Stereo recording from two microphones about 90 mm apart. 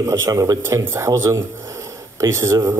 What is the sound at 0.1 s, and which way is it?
Speech, 35° right (ahead or behind).